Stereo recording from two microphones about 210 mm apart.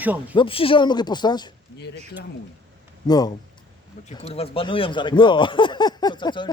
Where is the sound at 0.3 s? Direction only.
25° left (ahead or behind).